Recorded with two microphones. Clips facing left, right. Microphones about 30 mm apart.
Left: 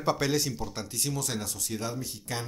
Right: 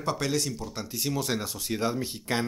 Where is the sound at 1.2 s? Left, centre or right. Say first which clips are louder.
Right 3 dB; right.